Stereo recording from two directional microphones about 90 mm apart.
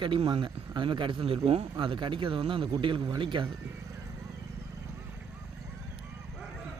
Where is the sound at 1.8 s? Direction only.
65° right (ahead or behind).